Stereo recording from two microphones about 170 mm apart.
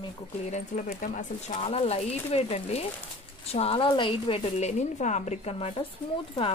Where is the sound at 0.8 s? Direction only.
50° left (ahead or behind).